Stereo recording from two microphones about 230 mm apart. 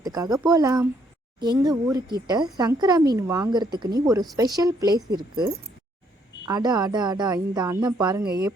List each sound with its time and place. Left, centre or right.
0.0 s speech: centre
8.2 s a woman's voice: right